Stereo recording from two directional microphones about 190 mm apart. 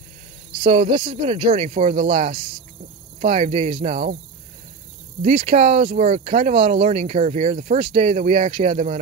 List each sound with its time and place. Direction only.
0.7 s speech: 30° right (ahead or behind)
5.2 s speech: 30° right (ahead or behind)